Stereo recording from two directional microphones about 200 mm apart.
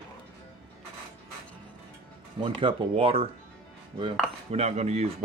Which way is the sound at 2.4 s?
25° right (ahead or behind).